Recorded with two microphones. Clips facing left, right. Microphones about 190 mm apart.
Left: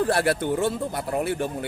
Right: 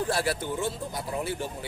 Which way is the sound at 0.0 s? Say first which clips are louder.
Left 6 dB; 60° left (ahead or behind).